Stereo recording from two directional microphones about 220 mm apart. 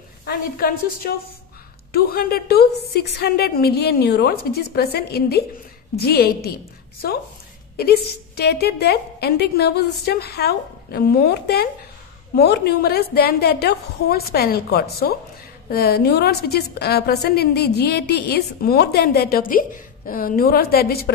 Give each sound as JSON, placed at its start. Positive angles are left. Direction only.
{"t": 0.2, "sound": "a woman's voice", "side_deg": 45}